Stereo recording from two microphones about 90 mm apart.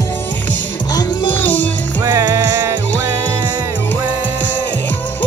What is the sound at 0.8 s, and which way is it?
Music, 45° left (ahead or behind).